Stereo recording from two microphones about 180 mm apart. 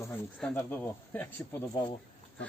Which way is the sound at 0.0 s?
10° left (ahead or behind).